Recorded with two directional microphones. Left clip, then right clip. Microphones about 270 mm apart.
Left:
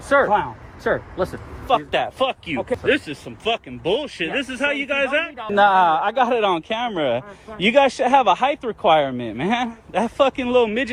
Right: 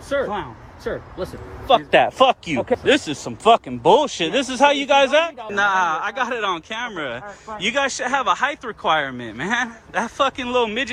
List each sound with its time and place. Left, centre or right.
0.1 s speech: centre
1.6 s speech: right
3.7 s speech: right
4.3 s a man's voice: centre
5.5 s speech: centre